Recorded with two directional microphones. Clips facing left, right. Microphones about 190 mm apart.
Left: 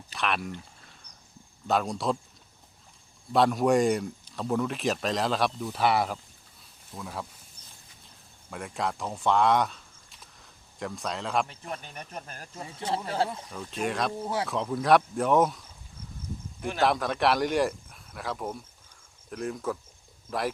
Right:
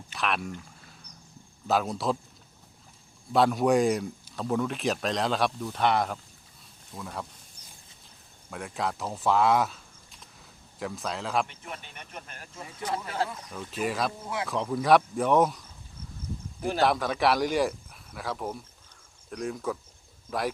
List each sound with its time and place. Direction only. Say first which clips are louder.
0.1 s speech: even; centre (ahead or behind)
1.6 s speech: even; centre (ahead or behind)
3.3 s speech: even; centre (ahead or behind)
8.0 s a sound: right 1 dB; centre (ahead or behind)
10.8 s speech: even; centre (ahead or behind)
11.7 s speech: left 4 dB; 35° left (ahead or behind)
13.5 s speech: even; 5° right (ahead or behind)
14.2 s speech: left 4 dB; 35° left (ahead or behind)
14.4 s speech: right 3 dB; centre (ahead or behind)
16.8 s speech: even; centre (ahead or behind)